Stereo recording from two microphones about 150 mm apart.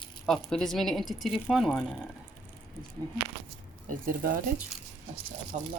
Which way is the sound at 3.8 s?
70° right (ahead or behind).